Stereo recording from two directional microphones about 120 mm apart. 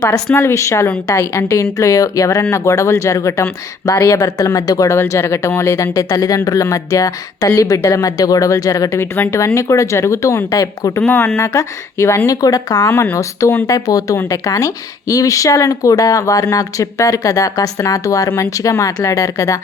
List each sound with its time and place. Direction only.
0.3 s speech: 25° left (ahead or behind)
11.0 s speech: 20° left (ahead or behind)